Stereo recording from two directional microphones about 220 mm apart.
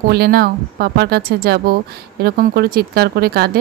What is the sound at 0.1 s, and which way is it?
A woman's voice, 45° right (ahead or behind).